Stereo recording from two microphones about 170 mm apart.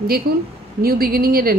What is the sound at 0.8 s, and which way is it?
Speech, 60° right (ahead or behind).